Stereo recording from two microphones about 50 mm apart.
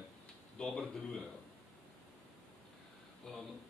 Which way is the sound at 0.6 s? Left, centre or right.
Left.